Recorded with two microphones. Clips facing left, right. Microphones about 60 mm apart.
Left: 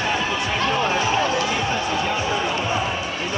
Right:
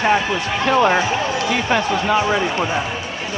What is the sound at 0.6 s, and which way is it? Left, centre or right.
Speech, right.